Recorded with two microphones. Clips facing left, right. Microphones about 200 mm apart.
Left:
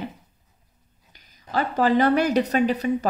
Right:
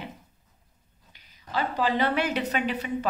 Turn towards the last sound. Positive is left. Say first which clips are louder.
# left 7 dB
turn(degrees=40)  # may be behind; listen again after turning